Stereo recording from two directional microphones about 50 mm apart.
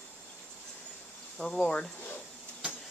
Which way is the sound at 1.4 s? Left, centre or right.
Left.